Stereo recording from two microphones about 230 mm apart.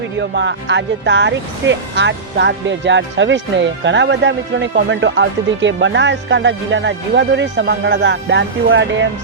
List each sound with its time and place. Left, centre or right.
0.2 s speech: right